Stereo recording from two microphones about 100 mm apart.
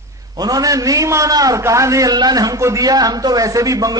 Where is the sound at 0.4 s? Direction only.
35° right (ahead or behind).